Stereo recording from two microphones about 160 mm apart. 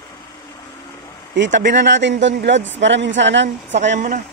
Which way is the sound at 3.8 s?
50° right (ahead or behind).